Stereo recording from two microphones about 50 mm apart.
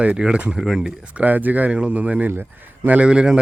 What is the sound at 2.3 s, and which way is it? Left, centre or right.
Speech, right.